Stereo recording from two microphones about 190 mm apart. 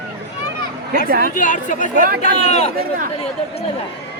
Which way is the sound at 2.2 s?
35° left (ahead or behind).